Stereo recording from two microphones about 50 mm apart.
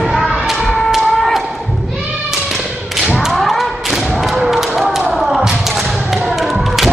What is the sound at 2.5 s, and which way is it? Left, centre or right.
Thump, centre.